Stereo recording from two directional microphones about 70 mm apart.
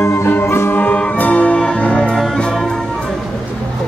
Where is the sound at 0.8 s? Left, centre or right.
Left.